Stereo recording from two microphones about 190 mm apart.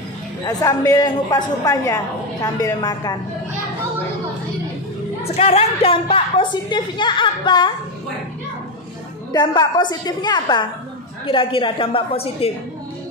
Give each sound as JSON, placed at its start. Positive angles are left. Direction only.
{"t": 0.5, "sound": "a woman's voice", "side_deg": 20}
{"t": 5.2, "sound": "a woman's voice", "side_deg": 30}
{"t": 9.3, "sound": "a woman's voice", "side_deg": 20}